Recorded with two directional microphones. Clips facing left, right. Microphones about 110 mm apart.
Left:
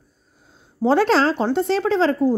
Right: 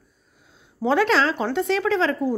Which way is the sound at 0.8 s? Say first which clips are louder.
Left 3 dB; 35° left (ahead or behind).